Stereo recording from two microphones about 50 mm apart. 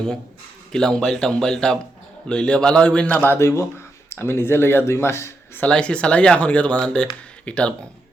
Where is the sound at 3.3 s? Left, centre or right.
Left.